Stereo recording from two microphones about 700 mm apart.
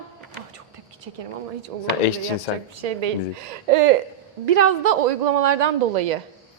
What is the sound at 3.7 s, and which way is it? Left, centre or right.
Speech, right.